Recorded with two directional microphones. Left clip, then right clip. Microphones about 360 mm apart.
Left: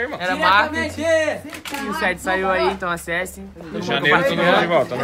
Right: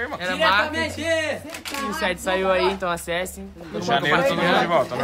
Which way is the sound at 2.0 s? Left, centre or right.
Centre.